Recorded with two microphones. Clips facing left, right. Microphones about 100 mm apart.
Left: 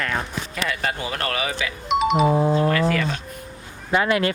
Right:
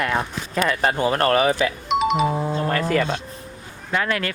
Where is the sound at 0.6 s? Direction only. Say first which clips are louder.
Right 7 dB; 45° right (ahead or behind).